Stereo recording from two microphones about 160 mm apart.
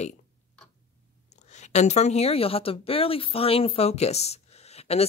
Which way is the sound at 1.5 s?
45° left (ahead or behind).